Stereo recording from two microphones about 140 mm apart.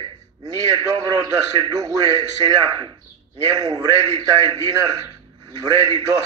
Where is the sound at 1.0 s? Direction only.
30° right (ahead or behind).